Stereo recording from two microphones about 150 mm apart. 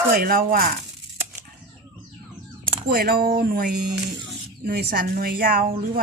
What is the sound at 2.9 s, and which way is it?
A woman's voice, 90° right.